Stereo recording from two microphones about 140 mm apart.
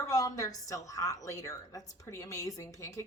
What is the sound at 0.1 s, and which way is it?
A woman's voice, 25° left (ahead or behind).